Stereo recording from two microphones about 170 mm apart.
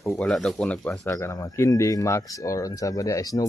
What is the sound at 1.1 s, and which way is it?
Speech, 15° left (ahead or behind).